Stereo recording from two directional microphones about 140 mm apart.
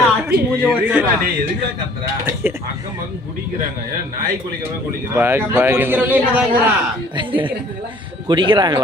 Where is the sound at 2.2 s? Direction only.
15° right (ahead or behind).